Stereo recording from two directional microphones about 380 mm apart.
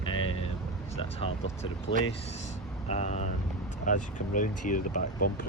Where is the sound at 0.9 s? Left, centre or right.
Centre.